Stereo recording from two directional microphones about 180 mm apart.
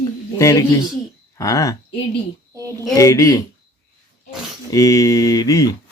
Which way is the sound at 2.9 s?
20° left (ahead or behind).